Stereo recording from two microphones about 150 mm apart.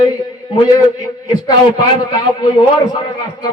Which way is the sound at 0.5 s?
30° left (ahead or behind).